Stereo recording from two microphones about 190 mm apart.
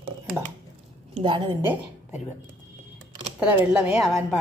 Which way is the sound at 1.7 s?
10° right (ahead or behind).